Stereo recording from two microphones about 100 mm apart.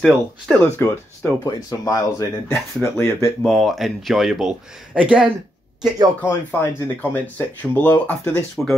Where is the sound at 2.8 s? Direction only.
25° left (ahead or behind).